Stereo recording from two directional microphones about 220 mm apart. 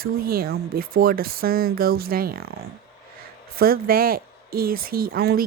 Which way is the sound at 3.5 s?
40° right (ahead or behind).